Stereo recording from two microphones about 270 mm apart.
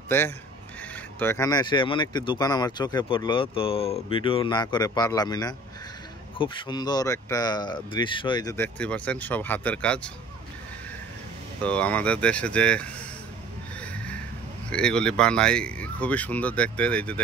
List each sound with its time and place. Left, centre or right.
1.2 s speech: centre
11.6 s speech: centre
13.7 s a sound: centre
14.7 s speech: centre